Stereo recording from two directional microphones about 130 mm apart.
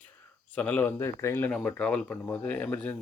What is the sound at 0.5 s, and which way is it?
Speech, 10° left (ahead or behind).